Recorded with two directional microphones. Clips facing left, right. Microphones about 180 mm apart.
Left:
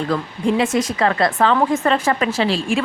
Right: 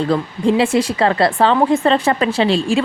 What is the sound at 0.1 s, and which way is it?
A woman's voice, 30° right (ahead or behind).